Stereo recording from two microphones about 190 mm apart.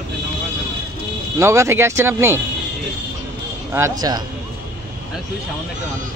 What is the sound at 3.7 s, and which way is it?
Speech, 15° right (ahead or behind).